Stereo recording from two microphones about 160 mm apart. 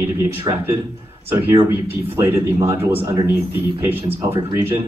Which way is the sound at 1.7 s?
15° right (ahead or behind).